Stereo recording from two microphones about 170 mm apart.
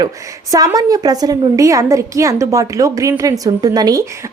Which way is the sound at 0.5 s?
20° right (ahead or behind).